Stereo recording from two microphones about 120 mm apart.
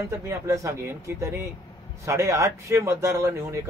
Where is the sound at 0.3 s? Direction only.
25° right (ahead or behind).